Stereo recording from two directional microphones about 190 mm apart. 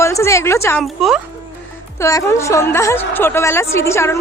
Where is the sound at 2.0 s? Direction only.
15° left (ahead or behind).